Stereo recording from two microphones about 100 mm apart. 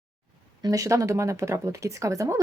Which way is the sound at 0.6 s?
35° right (ahead or behind).